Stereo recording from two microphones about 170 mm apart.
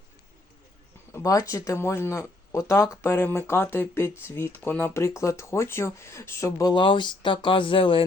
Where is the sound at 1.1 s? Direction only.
20° left (ahead or behind).